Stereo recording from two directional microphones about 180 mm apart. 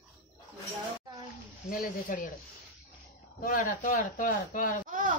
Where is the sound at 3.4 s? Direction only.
50° left (ahead or behind).